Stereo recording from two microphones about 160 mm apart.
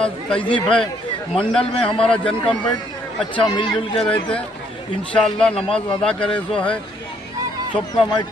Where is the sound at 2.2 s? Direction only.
30° left (ahead or behind).